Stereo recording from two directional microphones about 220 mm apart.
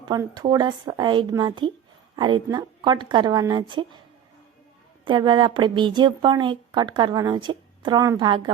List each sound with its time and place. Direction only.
0.0 s a woman's voice: 20° right (ahead or behind)
5.0 s a woman's voice: 20° right (ahead or behind)